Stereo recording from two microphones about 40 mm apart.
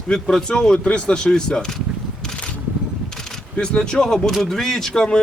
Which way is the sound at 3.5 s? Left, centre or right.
Left.